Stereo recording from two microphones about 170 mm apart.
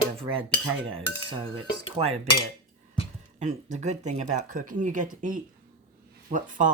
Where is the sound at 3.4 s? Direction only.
45° right (ahead or behind).